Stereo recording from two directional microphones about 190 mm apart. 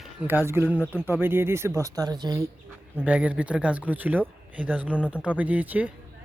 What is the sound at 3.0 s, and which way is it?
Speech, 5° right (ahead or behind).